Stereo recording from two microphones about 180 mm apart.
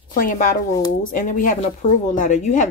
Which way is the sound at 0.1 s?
50° left (ahead or behind).